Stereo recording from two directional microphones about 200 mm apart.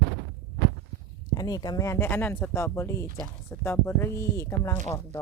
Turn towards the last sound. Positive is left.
turn(degrees=15)  # may be behind; listen again after turning